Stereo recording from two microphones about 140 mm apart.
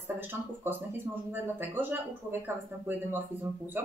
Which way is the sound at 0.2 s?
15° right (ahead or behind).